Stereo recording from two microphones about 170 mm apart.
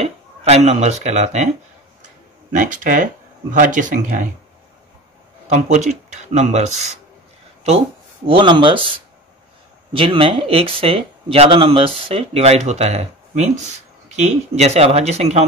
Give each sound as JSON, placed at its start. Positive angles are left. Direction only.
{"t": 0.0, "sound": "speech", "side_deg": -35}
{"t": 2.5, "sound": "speech", "side_deg": -50}
{"t": 5.5, "sound": "speech", "side_deg": -45}
{"t": 8.3, "sound": "speech", "side_deg": -30}